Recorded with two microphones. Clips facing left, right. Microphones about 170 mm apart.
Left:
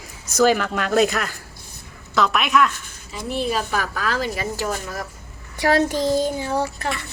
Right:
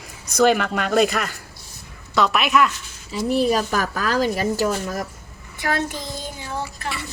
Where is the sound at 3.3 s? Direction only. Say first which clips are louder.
Right 4 dB; 40° right (ahead or behind).